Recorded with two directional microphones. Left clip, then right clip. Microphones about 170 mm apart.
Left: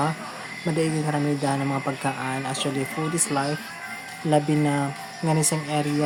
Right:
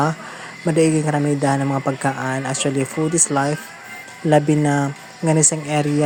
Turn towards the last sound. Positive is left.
turn(degrees=-35)  # may be behind; listen again after turning